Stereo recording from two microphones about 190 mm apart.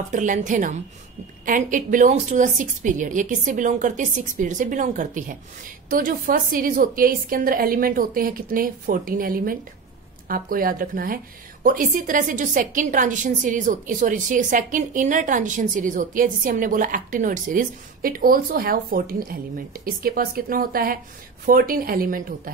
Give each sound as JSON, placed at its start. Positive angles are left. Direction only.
{"t": 0.1, "sound": "a woman's voice", "side_deg": -40}